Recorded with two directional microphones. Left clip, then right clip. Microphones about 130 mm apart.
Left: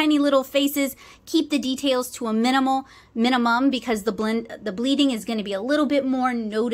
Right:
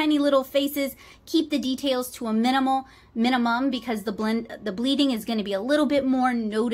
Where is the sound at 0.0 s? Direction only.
25° left (ahead or behind).